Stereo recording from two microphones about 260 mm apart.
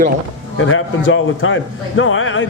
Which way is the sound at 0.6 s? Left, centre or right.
Left.